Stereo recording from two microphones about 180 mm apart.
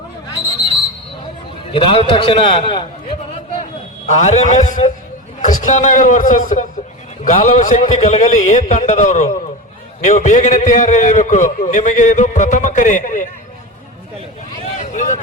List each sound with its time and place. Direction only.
1.7 s a man's voice: 30° left (ahead or behind)
4.0 s a man's voice: 40° left (ahead or behind)
14.8 s vehicle: 45° left (ahead or behind)